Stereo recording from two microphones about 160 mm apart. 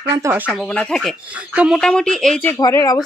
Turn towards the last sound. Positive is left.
turn(degrees=20)  # may be behind; listen again after turning